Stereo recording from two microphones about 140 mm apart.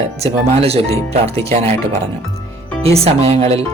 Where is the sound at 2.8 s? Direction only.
45° right (ahead or behind).